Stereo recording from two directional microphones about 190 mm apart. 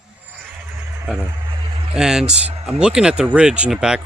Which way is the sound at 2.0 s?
5° right (ahead or behind).